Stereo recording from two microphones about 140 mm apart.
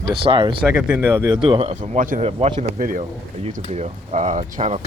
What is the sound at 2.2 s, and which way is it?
Speech, 45° right (ahead or behind).